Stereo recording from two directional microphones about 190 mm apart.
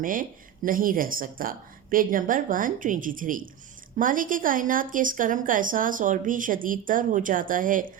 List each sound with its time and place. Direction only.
0.0 s a woman's voice: 45° right (ahead or behind)